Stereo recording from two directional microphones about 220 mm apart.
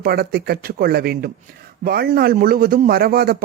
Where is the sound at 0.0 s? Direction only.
45° right (ahead or behind).